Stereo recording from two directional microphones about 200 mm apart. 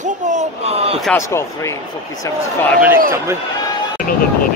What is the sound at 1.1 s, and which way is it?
Speech, 15° left (ahead or behind).